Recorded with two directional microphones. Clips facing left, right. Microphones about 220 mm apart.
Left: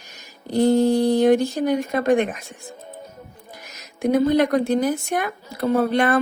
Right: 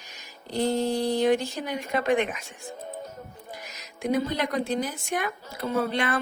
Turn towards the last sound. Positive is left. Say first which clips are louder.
# left 8 dB
turn(degrees=50)  # may be behind; listen again after turning